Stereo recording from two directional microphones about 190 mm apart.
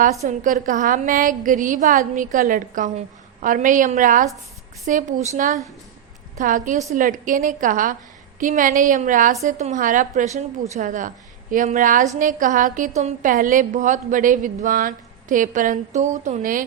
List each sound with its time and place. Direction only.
0.0 s a woman's voice: 40° right (ahead or behind)